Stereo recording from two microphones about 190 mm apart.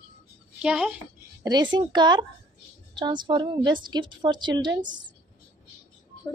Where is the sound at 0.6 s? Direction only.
5° right (ahead or behind).